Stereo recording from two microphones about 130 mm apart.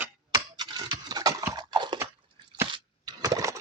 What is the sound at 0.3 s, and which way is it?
Scratch, 35° right (ahead or behind).